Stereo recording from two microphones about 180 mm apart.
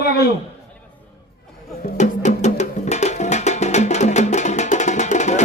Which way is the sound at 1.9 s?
40° left (ahead or behind).